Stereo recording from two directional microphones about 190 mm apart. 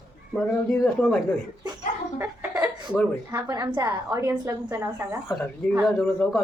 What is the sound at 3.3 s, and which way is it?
A woman's voice, 20° right (ahead or behind).